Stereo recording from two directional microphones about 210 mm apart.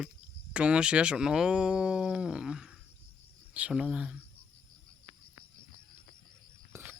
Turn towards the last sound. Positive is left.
turn(degrees=-10)  # may be behind; listen again after turning